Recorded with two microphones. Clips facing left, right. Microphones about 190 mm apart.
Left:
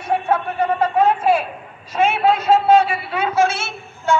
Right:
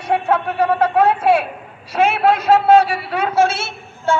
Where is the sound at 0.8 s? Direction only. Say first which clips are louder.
Even; 70° right (ahead or behind).